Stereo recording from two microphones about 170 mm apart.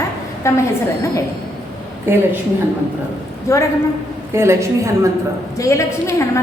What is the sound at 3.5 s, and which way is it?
Speech, 15° left (ahead or behind).